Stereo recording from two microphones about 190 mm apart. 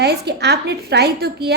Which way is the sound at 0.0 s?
60° right (ahead or behind).